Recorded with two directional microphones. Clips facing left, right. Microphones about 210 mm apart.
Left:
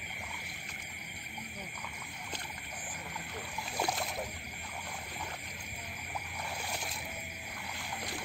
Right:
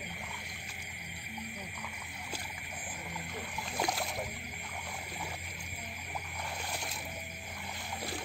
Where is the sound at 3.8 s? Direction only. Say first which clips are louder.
Even; 5° right (ahead or behind).